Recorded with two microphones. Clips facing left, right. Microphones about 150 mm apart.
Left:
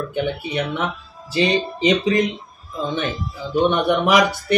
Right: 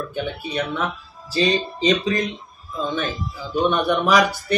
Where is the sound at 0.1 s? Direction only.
20° left (ahead or behind).